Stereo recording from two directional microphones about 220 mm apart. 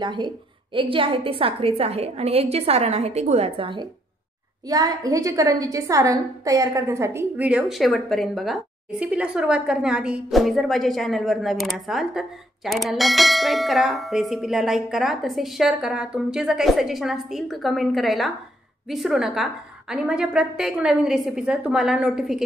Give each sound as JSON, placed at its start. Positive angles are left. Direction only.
{"t": 0.0, "sound": "a woman's voice", "side_deg": -20}